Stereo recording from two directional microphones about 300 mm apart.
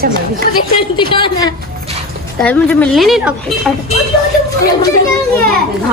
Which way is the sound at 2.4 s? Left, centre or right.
Centre.